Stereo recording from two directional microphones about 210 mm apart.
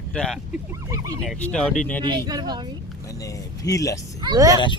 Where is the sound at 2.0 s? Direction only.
20° right (ahead or behind).